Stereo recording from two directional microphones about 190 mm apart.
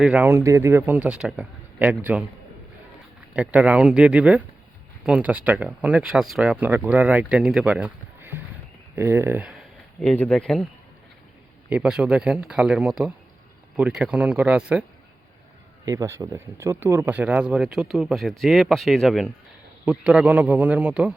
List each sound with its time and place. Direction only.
0.0 s speech: 10° right (ahead or behind)
3.3 s speech: 5° right (ahead or behind)
11.7 s speech: 5° right (ahead or behind)
15.9 s speech: 15° right (ahead or behind)